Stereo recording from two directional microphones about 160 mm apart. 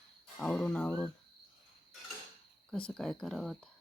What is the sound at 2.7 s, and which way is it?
Speech, 5° left (ahead or behind).